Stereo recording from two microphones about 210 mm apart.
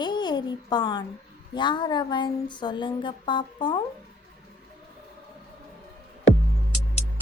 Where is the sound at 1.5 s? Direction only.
20° left (ahead or behind).